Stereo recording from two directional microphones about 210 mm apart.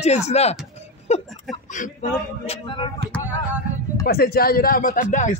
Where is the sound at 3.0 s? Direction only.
50° right (ahead or behind).